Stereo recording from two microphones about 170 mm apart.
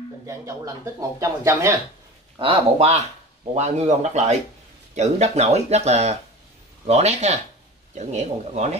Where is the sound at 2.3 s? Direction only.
35° right (ahead or behind).